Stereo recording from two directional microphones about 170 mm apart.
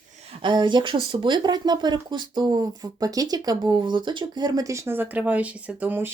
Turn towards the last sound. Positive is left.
turn(degrees=-10)  # may be behind; listen again after turning